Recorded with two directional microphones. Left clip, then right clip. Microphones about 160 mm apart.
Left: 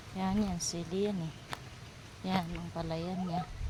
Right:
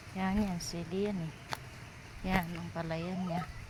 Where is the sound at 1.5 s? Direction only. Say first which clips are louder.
Right 3 dB; 45° right (ahead or behind).